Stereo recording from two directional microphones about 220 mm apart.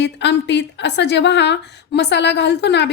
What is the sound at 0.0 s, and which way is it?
A woman's voice, 50° left (ahead or behind).